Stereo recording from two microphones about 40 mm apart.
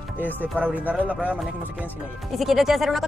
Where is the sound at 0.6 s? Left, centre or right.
Right.